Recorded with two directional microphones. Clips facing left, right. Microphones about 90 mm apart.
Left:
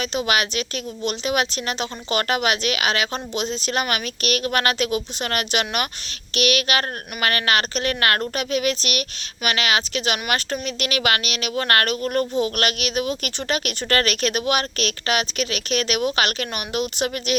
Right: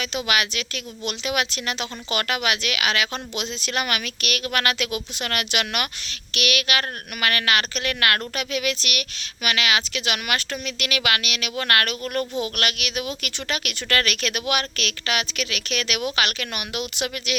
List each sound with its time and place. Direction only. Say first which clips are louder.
0.0 s speech: left 2 dB; 35° left (ahead or behind)